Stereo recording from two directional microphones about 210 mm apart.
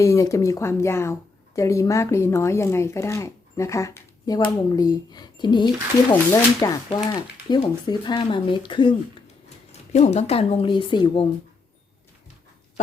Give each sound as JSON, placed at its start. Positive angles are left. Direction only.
{"t": 0.0, "sound": "speech", "side_deg": 15}